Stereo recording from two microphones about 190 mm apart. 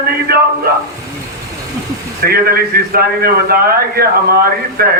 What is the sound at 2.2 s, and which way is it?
A man's voice, 50° right (ahead or behind).